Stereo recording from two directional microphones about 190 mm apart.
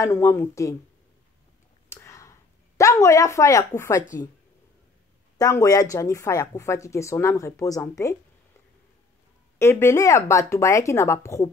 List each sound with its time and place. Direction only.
0.0 s speech: 15° left (ahead or behind)
1.9 s a sound: 15° left (ahead or behind)
2.8 s speech: 15° left (ahead or behind)
5.4 s speech: 20° left (ahead or behind)
9.6 s speech: 15° left (ahead or behind)